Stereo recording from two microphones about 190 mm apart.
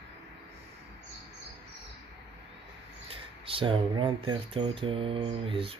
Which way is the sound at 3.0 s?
30° right (ahead or behind).